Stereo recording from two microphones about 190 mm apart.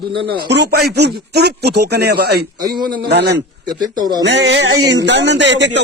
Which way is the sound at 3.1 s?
60° right (ahead or behind).